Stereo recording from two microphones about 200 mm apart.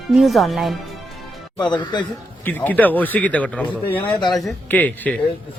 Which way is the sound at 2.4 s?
10° left (ahead or behind).